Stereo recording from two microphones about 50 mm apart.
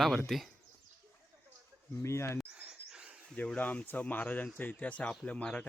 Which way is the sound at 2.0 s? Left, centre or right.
Left.